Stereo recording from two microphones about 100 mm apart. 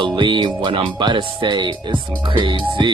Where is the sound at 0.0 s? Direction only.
55° right (ahead or behind).